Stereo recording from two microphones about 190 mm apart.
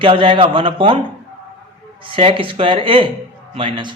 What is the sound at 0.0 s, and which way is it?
Speech, 30° right (ahead or behind).